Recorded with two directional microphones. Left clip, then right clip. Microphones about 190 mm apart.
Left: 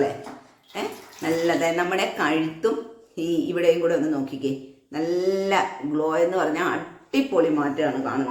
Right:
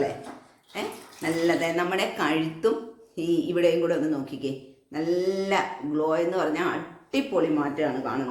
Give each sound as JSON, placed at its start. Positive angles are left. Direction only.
{"t": 0.7, "sound": "a man's voice", "side_deg": 5}